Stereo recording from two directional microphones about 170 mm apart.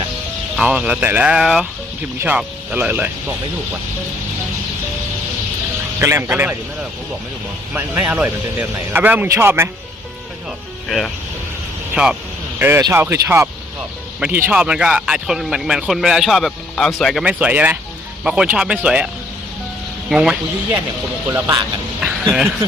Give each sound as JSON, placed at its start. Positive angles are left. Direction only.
{"t": 0.5, "sound": "speech", "side_deg": -5}
{"t": 6.0, "sound": "speech", "side_deg": -15}
{"t": 7.7, "sound": "speech", "side_deg": -10}
{"t": 10.8, "sound": "speech", "side_deg": 0}
{"t": 17.2, "sound": "speech", "side_deg": -10}
{"t": 20.1, "sound": "speech", "side_deg": -5}
{"t": 21.2, "sound": "speech", "side_deg": -15}